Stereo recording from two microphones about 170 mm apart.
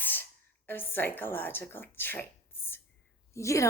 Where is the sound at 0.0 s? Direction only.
10° left (ahead or behind).